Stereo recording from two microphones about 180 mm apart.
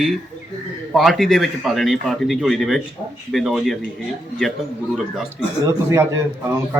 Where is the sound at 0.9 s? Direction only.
Centre (ahead or behind).